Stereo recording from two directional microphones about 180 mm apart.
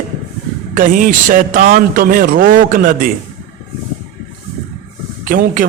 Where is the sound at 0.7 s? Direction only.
50° right (ahead or behind).